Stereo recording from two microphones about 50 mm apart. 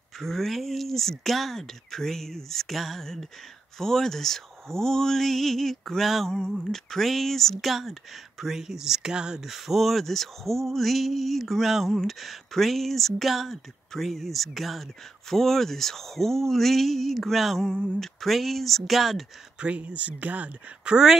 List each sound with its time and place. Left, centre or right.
0.2 s speech: centre
19.6 s speech: right
20.8 s speech: centre